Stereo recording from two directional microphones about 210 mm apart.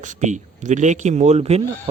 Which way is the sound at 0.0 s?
35° right (ahead or behind).